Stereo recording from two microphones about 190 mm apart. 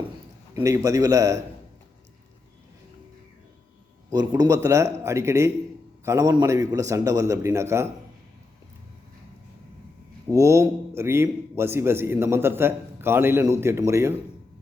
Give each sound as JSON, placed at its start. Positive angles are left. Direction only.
{"t": 0.5, "sound": "a man's voice", "side_deg": -15}
{"t": 4.1, "sound": "a man's voice", "side_deg": -20}
{"t": 10.2, "sound": "a man's voice", "side_deg": -15}